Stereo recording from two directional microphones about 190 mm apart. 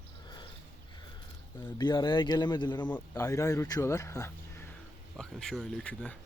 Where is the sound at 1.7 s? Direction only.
20° left (ahead or behind).